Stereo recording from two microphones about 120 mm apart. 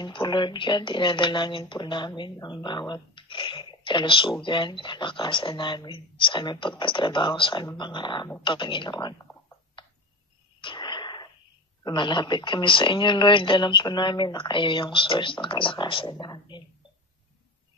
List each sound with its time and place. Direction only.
0.0 s speech: 40° left (ahead or behind)
9.8 s a sound: 45° left (ahead or behind)
10.6 s radio: 40° left (ahead or behind)
11.8 s speech: 40° left (ahead or behind)